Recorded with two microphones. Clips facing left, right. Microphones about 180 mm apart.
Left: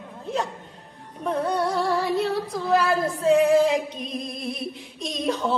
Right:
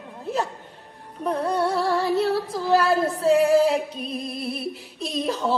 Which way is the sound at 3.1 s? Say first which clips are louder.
Left 2 dB; 35° right (ahead or behind).